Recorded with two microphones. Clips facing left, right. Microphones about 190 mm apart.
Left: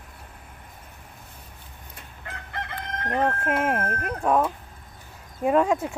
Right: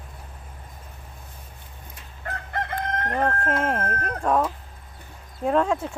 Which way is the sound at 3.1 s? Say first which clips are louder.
Left 1 dB; 10° left (ahead or behind).